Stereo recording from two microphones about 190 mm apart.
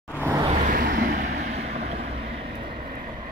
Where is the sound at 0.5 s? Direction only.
40° right (ahead or behind).